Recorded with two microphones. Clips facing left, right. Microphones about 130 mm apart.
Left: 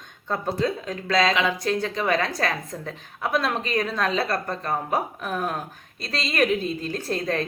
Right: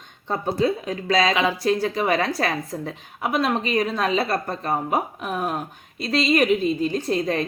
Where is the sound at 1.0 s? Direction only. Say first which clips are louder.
Right 1 dB; 30° right (ahead or behind).